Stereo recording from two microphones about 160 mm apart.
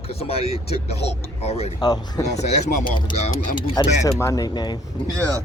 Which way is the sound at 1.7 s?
25° left (ahead or behind).